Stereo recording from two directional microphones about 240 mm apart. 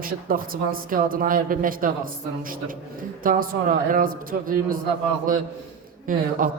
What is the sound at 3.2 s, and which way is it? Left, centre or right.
A man's voice, right.